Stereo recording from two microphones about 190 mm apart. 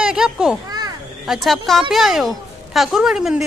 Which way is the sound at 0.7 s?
20° right (ahead or behind).